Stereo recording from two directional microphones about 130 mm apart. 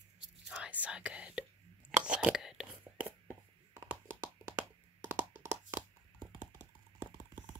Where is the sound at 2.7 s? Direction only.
15° right (ahead or behind).